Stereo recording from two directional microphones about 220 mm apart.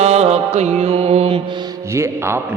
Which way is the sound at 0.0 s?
30° right (ahead or behind).